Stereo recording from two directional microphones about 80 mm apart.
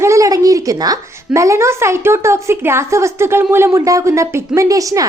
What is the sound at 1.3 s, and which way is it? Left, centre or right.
A woman's voice, right.